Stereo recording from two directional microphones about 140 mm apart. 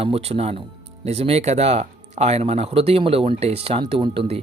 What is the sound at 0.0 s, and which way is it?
Speech, 45° right (ahead or behind).